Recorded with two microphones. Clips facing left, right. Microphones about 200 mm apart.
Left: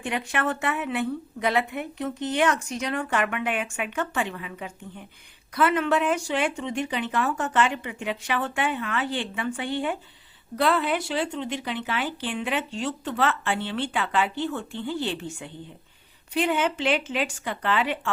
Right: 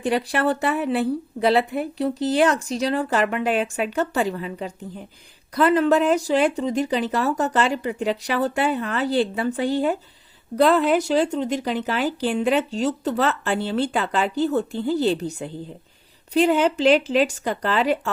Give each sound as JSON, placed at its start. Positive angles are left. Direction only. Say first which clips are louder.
{"t": 0.0, "sound": "speech", "louder": "right 6 dB", "side_deg": -35}